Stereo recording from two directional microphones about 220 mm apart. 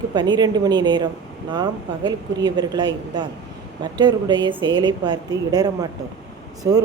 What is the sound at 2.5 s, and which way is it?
A woman's voice, 20° right (ahead or behind).